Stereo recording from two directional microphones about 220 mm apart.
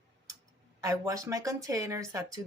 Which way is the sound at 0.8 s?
15° right (ahead or behind).